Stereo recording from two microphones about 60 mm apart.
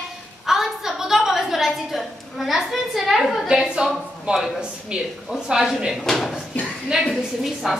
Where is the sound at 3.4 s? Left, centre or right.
Centre.